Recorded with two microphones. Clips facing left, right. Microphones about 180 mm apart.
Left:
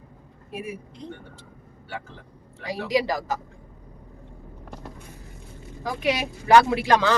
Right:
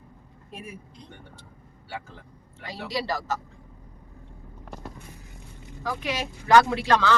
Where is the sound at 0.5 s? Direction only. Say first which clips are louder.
Left 7 dB; 10° left (ahead or behind).